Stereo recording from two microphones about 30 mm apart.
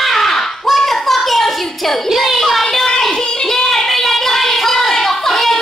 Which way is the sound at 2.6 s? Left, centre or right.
Left.